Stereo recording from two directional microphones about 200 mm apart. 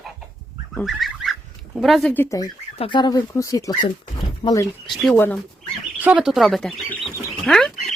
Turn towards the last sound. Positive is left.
turn(degrees=0)  # may be behind; listen again after turning